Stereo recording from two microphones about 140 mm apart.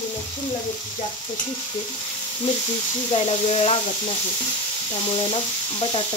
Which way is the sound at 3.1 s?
45° left (ahead or behind).